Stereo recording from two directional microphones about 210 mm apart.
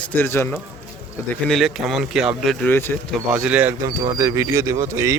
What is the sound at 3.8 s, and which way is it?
Speech, 15° right (ahead or behind).